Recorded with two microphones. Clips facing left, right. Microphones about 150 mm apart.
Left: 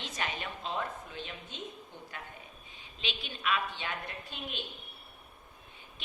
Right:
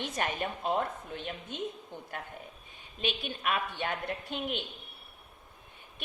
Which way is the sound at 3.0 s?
50° right (ahead or behind).